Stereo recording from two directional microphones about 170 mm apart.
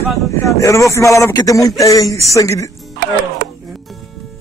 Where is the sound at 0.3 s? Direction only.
20° left (ahead or behind).